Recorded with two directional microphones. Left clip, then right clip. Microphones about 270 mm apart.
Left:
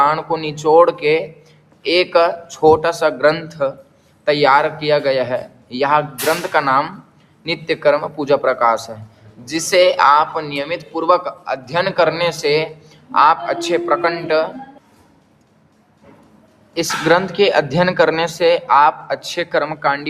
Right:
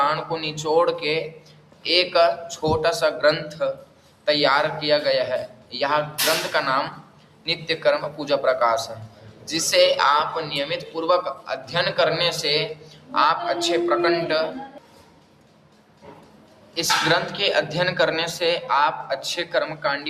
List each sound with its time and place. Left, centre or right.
0.0 s a man's voice: centre
16.7 s a man's voice: left